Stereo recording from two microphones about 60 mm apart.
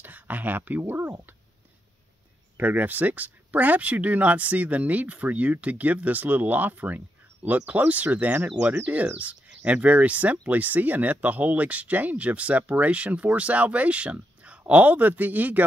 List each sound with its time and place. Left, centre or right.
0.0 s speech: right
2.5 s speech: right